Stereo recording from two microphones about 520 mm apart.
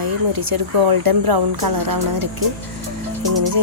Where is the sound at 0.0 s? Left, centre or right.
Right.